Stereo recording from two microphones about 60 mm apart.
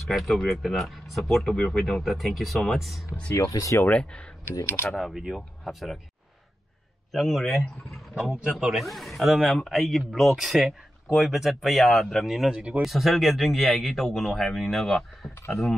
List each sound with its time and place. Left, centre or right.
0.0 s speech: centre
3.3 s speech: left
3.9 s speech: centre
4.8 s speech: centre
7.1 s speech: centre
8.2 s speech: centre
12.5 s speech: centre
12.8 s speech: centre